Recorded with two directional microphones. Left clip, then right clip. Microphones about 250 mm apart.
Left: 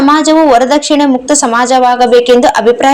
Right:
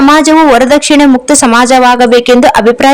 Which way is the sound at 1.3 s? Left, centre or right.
Right.